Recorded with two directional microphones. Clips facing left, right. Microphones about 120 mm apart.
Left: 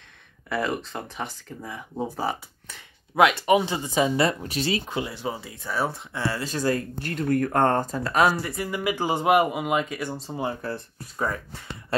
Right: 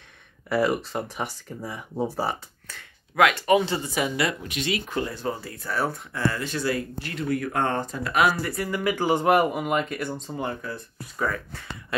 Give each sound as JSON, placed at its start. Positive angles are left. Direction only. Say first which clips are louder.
{"t": 0.5, "sound": "speech", "louder": "right 4 dB", "side_deg": -5}
{"t": 2.7, "sound": "speech", "louder": "left 3 dB", "side_deg": 25}
{"t": 4.8, "sound": "speech", "louder": "right 1 dB", "side_deg": 15}
{"t": 5.2, "sound": "speech", "louder": "right 1 dB", "side_deg": 5}
{"t": 5.8, "sound": "speech", "louder": "right 1 dB", "side_deg": 25}
{"t": 6.4, "sound": "speech", "louder": "left 2 dB", "side_deg": 40}
{"t": 8.4, "sound": "speech", "louder": "right 1 dB", "side_deg": 20}
{"t": 10.6, "sound": "speech", "louder": "left 3 dB", "side_deg": 30}